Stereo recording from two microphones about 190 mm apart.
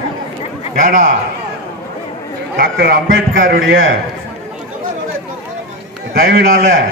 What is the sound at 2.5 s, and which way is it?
Speech, 55° right (ahead or behind).